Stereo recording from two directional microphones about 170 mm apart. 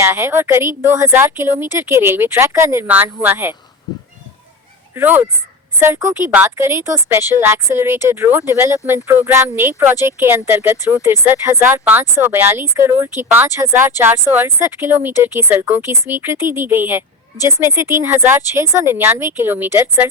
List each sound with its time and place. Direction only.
0.0 s speech: 15° right (ahead or behind)
4.9 s speech: 10° right (ahead or behind)